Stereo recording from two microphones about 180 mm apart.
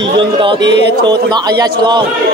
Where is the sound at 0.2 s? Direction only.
30° right (ahead or behind).